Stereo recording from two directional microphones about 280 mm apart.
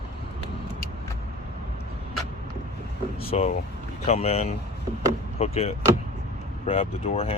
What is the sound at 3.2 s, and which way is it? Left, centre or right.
Speech, left.